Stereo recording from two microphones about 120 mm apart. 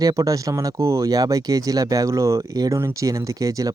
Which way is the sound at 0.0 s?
30° right (ahead or behind).